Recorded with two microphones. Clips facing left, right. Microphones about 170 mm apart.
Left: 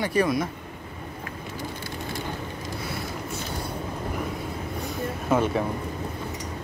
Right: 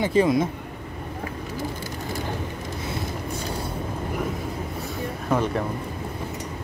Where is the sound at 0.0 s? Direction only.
20° right (ahead or behind).